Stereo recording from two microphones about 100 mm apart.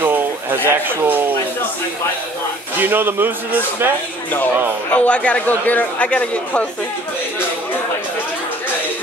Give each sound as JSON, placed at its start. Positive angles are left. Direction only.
{"t": 0.0, "sound": "a sound", "side_deg": -20}
{"t": 0.7, "sound": "a man's voice", "side_deg": -20}
{"t": 2.8, "sound": "a man's voice", "side_deg": -20}
{"t": 4.9, "sound": "a man's voice", "side_deg": 10}